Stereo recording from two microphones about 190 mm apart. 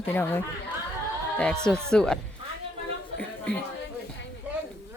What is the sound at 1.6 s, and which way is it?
Speech, 5° left (ahead or behind).